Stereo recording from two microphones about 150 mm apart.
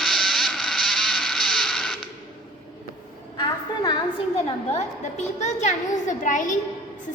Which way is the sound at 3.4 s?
30° left (ahead or behind).